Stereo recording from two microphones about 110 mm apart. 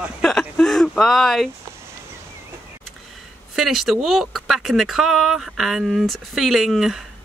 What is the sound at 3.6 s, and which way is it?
Speech, 5° right (ahead or behind).